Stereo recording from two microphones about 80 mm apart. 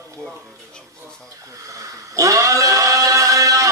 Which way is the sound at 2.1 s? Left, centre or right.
Right.